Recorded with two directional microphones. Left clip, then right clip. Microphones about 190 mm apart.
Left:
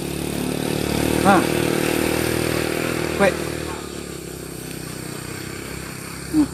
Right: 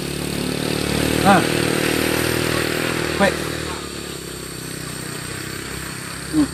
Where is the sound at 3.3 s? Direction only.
55° left (ahead or behind).